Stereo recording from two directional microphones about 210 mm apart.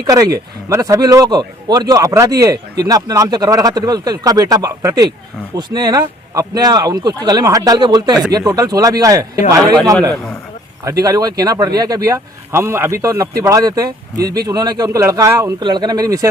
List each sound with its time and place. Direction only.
0.0 s a man's voice: 15° right (ahead or behind)